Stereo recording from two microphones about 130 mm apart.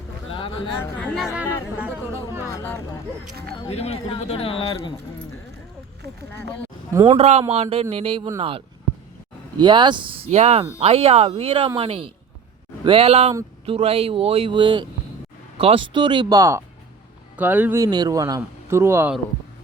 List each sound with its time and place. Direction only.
0.3 s a sound: 40° left (ahead or behind)
1.4 s speech: 15° right (ahead or behind)
3.7 s speech: 55° left (ahead or behind)
7.1 s speech: 55° right (ahead or behind); by 16.4 s 35° right (ahead or behind)
16.4 s a man's voice: 20° right (ahead or behind)
17.7 s a man's voice: 30° right (ahead or behind)